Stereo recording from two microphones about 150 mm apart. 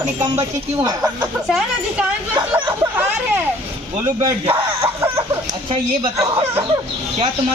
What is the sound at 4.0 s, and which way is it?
Speech, 20° right (ahead or behind).